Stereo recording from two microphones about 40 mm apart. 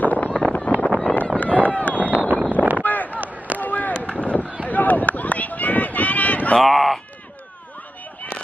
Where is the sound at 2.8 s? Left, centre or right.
Left.